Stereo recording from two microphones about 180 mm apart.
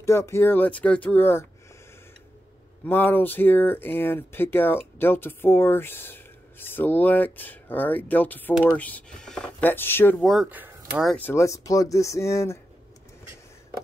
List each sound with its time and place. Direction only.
0.0 s speech: 15° left (ahead or behind)
2.9 s speech: 10° left (ahead or behind); by 10.7 s 5° right (ahead or behind)
11.0 s speech: 5° left (ahead or behind)